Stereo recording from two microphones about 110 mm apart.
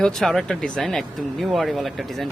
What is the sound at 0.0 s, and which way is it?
Speech, 5° left (ahead or behind).